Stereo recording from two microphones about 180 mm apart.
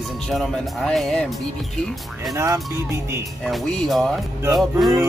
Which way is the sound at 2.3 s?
20° right (ahead or behind).